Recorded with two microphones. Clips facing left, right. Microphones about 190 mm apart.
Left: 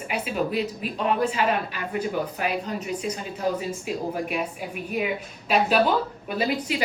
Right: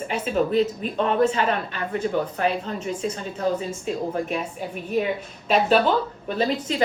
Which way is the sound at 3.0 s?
10° left (ahead or behind).